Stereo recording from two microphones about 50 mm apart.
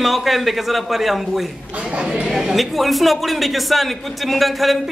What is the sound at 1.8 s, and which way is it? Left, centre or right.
Speech, right.